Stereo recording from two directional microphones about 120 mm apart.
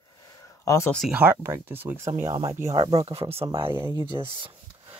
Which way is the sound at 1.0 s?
15° right (ahead or behind).